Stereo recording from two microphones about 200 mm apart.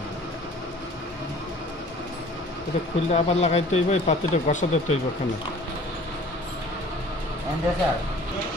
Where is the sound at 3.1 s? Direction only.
35° left (ahead or behind).